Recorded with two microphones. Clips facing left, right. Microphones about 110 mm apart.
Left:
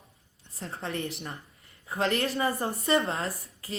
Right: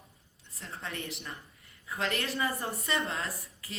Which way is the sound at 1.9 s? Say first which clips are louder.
Left 6 dB; 30° left (ahead or behind).